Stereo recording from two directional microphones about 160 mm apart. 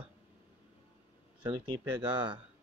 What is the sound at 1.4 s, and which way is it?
Speech, 25° right (ahead or behind).